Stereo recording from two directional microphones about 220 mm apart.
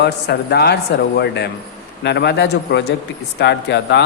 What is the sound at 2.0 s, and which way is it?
Speech, 50° left (ahead or behind).